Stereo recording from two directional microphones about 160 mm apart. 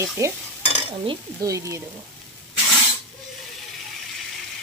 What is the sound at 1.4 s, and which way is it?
Speech, 20° right (ahead or behind).